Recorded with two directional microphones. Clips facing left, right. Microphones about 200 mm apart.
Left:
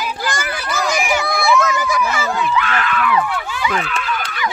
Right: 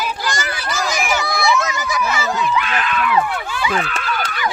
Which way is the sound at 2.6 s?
20° right (ahead or behind).